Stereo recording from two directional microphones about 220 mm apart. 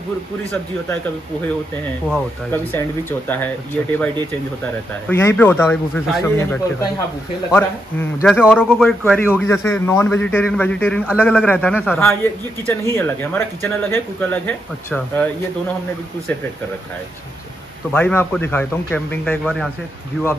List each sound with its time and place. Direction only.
2.0 s a man's voice: 10° left (ahead or behind)
5.0 s a man's voice: 10° left (ahead or behind)
17.9 s a man's voice: 10° left (ahead or behind)